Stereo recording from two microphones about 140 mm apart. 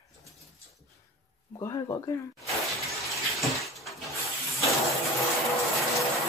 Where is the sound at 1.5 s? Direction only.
25° left (ahead or behind).